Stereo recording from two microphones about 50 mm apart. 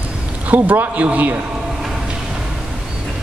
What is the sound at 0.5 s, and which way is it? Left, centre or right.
Speech, right.